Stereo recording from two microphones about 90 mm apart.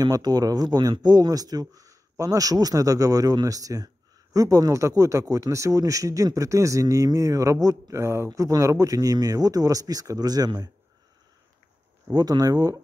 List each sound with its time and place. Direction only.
0.0 s speech: 45° right (ahead or behind); by 8.3 s 30° right (ahead or behind)
8.3 s speech: 40° right (ahead or behind)
12.1 s speech: 45° right (ahead or behind)